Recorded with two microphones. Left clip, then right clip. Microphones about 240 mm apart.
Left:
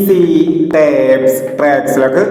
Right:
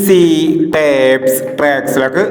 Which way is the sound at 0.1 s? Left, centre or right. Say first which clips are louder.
Right 1 dB; right.